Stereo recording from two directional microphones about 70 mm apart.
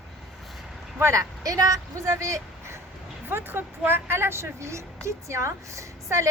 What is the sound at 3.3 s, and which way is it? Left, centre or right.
Speech, right.